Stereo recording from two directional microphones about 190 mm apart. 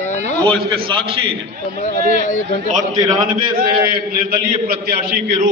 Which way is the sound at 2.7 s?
20° right (ahead or behind).